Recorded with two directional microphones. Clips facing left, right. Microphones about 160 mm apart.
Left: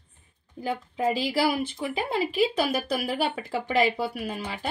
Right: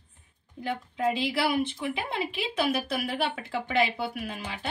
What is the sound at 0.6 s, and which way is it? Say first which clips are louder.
A woman's voice: left 2 dB; 40° left (ahead or behind).